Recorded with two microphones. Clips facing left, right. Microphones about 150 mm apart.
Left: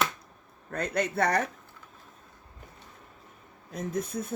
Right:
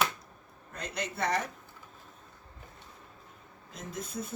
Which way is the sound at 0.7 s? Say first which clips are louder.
Left 8 dB; 55° left (ahead or behind).